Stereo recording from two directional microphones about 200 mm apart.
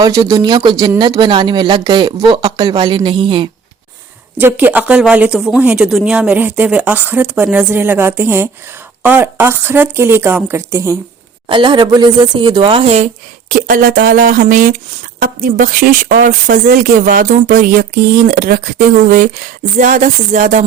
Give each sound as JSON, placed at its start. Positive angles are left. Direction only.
{"t": 0.0, "sound": "speech", "side_deg": -20}
{"t": 4.4, "sound": "speech", "side_deg": -10}
{"t": 13.5, "sound": "a woman's voice", "side_deg": -45}